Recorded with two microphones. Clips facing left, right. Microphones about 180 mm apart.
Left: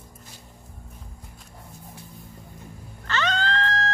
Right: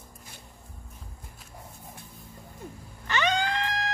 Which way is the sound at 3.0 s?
15° right (ahead or behind).